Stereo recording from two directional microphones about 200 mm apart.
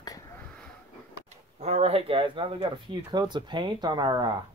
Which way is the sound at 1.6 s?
30° right (ahead or behind).